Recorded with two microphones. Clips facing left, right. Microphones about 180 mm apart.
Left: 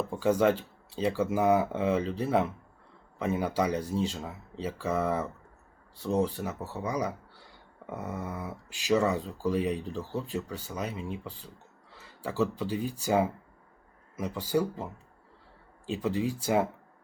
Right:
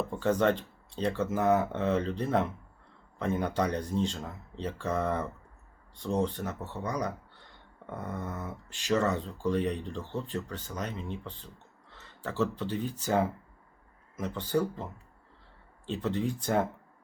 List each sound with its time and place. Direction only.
0.1 s speech: 10° left (ahead or behind)
15.9 s speech: 10° left (ahead or behind)